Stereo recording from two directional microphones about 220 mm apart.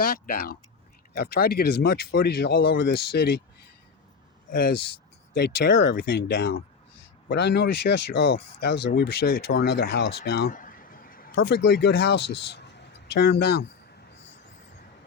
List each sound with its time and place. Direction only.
0.0 s speech: 40° left (ahead or behind)
5.3 s speech: 50° left (ahead or behind)